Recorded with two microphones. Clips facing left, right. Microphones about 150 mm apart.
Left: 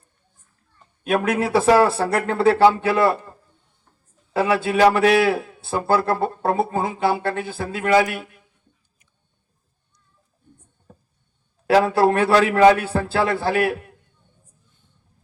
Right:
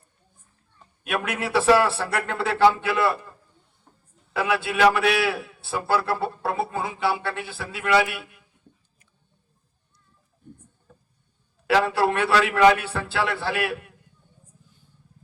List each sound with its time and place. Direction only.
1.0 s a man's voice: 40° left (ahead or behind)
4.4 s a man's voice: 40° left (ahead or behind)
11.6 s a man's voice: 40° left (ahead or behind)